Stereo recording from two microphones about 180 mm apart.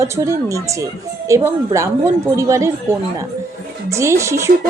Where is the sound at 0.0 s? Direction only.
15° right (ahead or behind).